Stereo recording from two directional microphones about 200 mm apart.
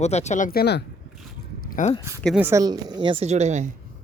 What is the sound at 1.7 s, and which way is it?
Speech, 35° left (ahead or behind).